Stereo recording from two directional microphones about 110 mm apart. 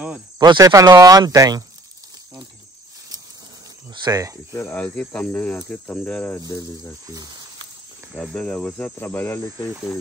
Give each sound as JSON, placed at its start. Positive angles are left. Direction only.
{"t": 0.4, "sound": "speech", "side_deg": -35}
{"t": 3.9, "sound": "speech", "side_deg": -40}
{"t": 4.5, "sound": "speech", "side_deg": 25}
{"t": 4.7, "sound": "speech", "side_deg": 10}
{"t": 8.1, "sound": "speech", "side_deg": -5}
{"t": 8.4, "sound": "speech", "side_deg": 10}